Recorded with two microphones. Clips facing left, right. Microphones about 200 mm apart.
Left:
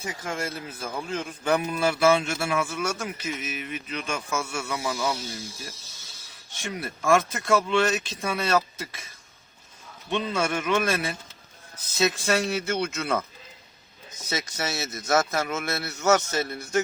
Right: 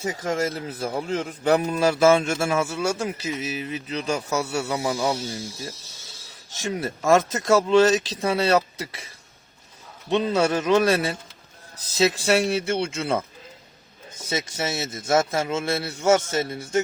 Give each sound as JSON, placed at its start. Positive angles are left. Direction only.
{"t": 0.3, "sound": "a man's voice", "side_deg": -35}
{"t": 6.5, "sound": "a man's voice", "side_deg": -40}
{"t": 10.1, "sound": "a man's voice", "side_deg": -35}